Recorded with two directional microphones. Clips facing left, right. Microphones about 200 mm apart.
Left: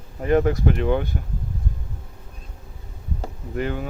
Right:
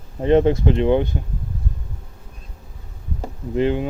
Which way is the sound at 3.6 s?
20° right (ahead or behind).